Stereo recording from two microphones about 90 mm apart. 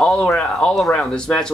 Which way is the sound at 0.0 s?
10° left (ahead or behind).